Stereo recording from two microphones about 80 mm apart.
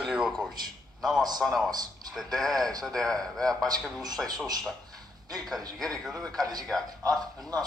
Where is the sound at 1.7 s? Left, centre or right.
Right.